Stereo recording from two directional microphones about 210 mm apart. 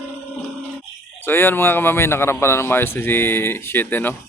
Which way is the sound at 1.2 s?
10° left (ahead or behind).